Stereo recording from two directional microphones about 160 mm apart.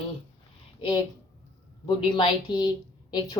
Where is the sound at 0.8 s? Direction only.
25° left (ahead or behind).